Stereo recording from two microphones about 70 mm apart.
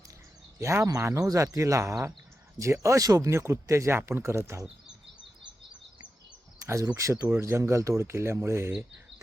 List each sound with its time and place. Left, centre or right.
0.6 s speech: right
1.3 s speech: right
6.6 s speech: right
7.1 s speech: right